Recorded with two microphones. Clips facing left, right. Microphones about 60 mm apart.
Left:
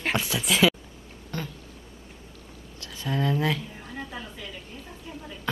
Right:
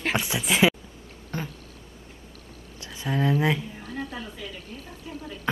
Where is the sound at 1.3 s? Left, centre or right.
Right.